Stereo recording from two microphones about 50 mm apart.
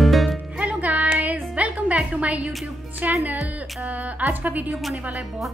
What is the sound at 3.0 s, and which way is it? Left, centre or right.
A woman's voice, right.